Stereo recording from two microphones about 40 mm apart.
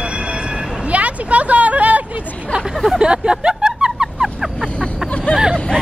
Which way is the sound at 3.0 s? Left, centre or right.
Right.